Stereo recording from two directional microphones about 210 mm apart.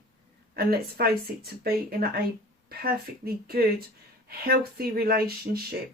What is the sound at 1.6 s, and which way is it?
Speech, 45° right (ahead or behind).